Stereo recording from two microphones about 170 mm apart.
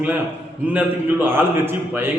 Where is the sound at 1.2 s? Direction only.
10° right (ahead or behind).